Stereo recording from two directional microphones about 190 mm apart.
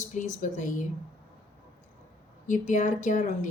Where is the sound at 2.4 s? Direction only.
40° left (ahead or behind).